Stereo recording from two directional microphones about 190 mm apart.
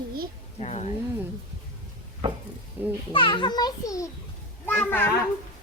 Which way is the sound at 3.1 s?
25° left (ahead or behind).